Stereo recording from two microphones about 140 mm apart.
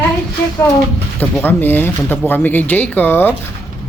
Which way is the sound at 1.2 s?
15° left (ahead or behind).